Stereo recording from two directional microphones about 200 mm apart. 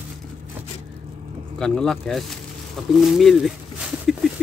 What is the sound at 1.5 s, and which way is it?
Speech, 5° left (ahead or behind).